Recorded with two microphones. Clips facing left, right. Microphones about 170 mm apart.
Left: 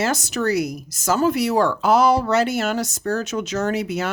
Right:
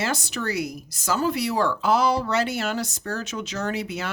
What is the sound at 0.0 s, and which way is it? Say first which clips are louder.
Speech: left 6 dB; 45° left (ahead or behind).